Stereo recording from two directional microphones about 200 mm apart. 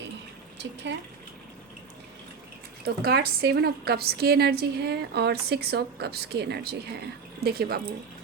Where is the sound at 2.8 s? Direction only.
50° right (ahead or behind).